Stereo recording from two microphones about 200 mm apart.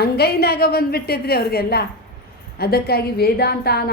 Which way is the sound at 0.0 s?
50° left (ahead or behind).